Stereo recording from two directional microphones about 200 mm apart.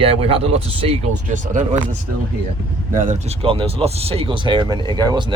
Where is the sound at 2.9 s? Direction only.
40° right (ahead or behind); by 5.3 s 20° right (ahead or behind).